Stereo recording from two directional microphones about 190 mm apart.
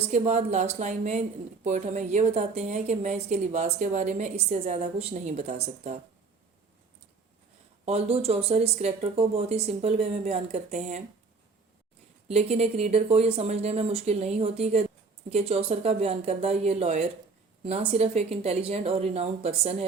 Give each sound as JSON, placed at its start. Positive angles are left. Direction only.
{"t": 0.1, "sound": "a woman's voice", "side_deg": -40}
{"t": 7.9, "sound": "a woman's voice", "side_deg": -35}
{"t": 12.3, "sound": "a woman's voice", "side_deg": -35}